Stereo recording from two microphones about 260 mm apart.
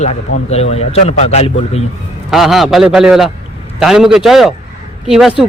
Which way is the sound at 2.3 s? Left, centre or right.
Centre.